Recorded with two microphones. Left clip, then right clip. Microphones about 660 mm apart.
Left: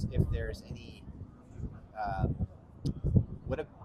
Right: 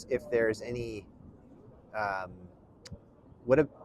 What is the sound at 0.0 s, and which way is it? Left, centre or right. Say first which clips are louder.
Speech: right 11 dB; right.